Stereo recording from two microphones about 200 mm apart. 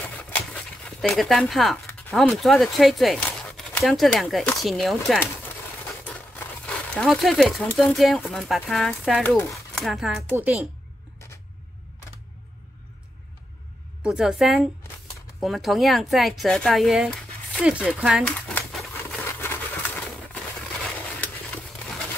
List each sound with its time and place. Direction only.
0.8 s speech: centre (ahead or behind)
14.0 s speech: 5° right (ahead or behind)
18.5 s a sound: 5° left (ahead or behind)